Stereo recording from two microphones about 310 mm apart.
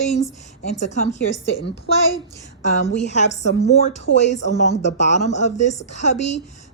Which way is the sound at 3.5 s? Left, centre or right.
Left.